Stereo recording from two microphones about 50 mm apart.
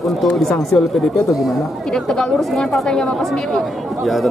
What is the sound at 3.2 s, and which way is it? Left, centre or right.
Speech, centre.